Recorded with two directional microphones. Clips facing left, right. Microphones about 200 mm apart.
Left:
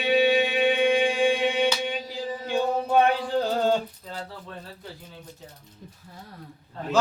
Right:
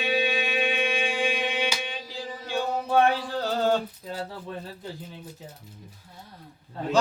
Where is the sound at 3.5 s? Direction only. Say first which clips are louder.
Right 1 dB; 15° left (ahead or behind).